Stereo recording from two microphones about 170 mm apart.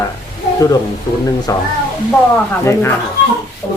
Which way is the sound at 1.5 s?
20° left (ahead or behind).